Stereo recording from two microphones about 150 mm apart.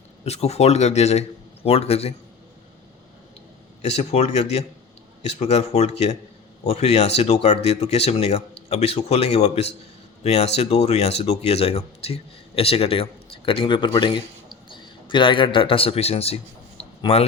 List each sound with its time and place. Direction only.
0.3 s speech: 45° left (ahead or behind)
3.8 s a man's voice: 50° left (ahead or behind)